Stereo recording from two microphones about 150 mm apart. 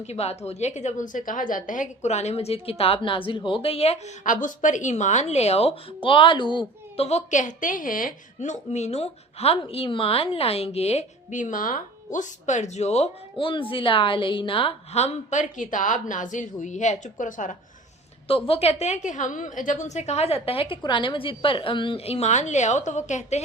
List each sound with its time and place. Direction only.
0.1 s a woman's voice: 45° left (ahead or behind); by 17.6 s 60° left (ahead or behind)
18.3 s a woman's voice: 40° left (ahead or behind)